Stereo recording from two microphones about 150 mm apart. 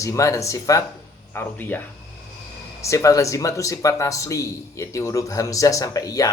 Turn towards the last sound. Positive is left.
turn(degrees=25)  # may be behind; listen again after turning